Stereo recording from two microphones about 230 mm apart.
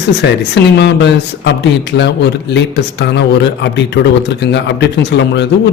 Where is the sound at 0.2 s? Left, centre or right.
Left.